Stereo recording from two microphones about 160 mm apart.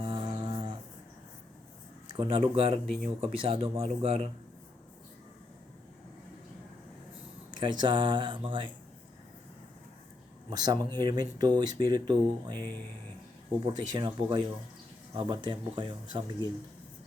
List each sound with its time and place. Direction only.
0.0 s music: 30° right (ahead or behind)
2.1 s speech: 35° right (ahead or behind)
2.8 s speech: 5° left (ahead or behind)
3.2 s speech: 35° right (ahead or behind)
7.5 s speech: 30° right (ahead or behind)
10.8 s speech: 15° left (ahead or behind)
11.0 s speech: 25° right (ahead or behind)
13.7 s speech: 25° right (ahead or behind)